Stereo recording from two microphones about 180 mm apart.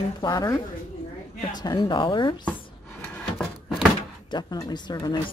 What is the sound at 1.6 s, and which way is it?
Speech, 25° left (ahead or behind).